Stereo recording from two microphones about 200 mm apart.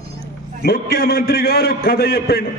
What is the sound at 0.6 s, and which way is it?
A man's voice, 50° left (ahead or behind).